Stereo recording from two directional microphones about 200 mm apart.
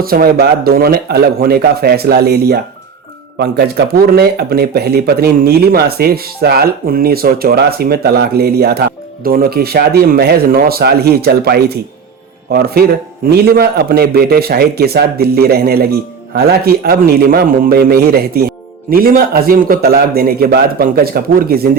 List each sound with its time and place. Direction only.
0.0 s a man's voice: 50° right (ahead or behind)